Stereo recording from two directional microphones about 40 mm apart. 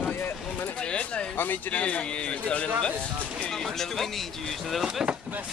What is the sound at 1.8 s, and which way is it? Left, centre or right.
Speech, left.